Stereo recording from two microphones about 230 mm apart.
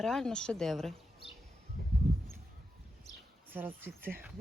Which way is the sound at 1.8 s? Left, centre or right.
Right.